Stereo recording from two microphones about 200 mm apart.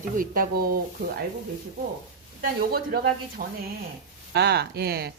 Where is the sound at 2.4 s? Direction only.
50° right (ahead or behind).